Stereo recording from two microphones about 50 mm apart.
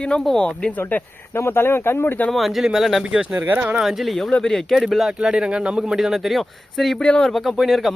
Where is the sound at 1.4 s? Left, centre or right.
Left.